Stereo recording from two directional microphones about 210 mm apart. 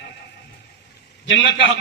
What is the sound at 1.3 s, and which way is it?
Speech, 60° left (ahead or behind).